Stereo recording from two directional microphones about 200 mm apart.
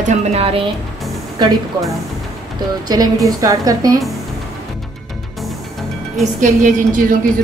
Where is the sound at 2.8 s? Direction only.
20° right (ahead or behind).